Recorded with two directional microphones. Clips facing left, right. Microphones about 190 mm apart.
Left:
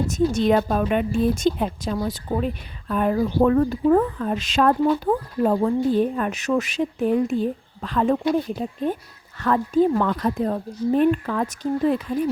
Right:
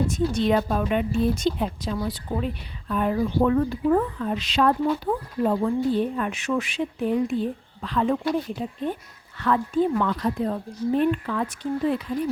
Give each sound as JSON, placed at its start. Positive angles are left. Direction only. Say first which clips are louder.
{"t": 0.1, "sound": "speech", "louder": "left 3 dB", "side_deg": 45}